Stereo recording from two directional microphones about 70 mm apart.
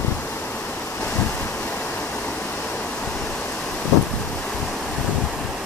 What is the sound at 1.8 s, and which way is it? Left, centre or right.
Waterfall, left.